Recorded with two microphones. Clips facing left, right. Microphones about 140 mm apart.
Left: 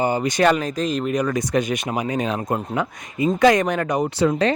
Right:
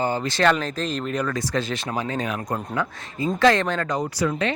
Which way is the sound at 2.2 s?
25° left (ahead or behind).